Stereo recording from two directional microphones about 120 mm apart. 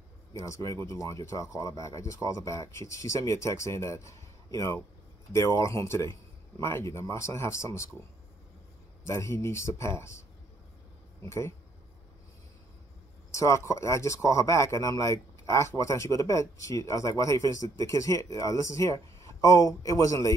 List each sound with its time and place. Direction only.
0.3 s speech: 25° left (ahead or behind)
9.0 s speech: 25° left (ahead or behind)
13.3 s speech: 25° left (ahead or behind)